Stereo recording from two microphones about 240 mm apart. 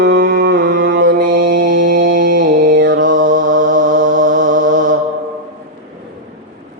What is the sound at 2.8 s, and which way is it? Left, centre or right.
Mantra, right.